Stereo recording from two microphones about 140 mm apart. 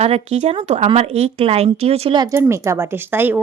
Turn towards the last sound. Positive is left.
turn(degrees=-15)  # may be behind; listen again after turning